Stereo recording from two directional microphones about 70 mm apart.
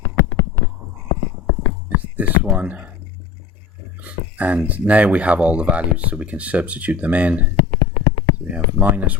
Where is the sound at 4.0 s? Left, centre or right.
Right.